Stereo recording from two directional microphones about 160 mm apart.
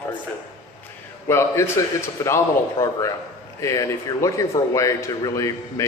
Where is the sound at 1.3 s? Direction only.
15° left (ahead or behind).